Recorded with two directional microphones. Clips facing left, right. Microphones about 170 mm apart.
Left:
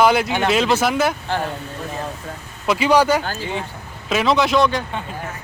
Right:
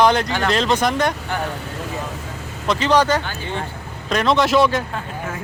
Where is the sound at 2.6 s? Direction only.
10° left (ahead or behind).